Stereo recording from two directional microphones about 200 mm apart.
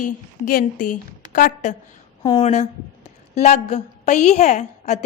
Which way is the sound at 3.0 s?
35° left (ahead or behind).